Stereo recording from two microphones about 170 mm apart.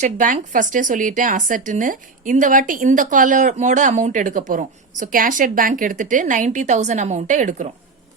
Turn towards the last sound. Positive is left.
turn(degrees=-45)  # may be behind; listen again after turning